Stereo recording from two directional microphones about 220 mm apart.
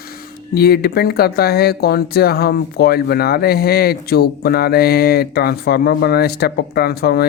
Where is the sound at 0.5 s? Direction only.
45° left (ahead or behind).